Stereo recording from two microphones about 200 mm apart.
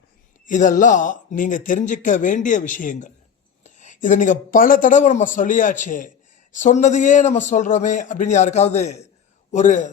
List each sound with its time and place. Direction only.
0.4 s speech: 40° left (ahead or behind)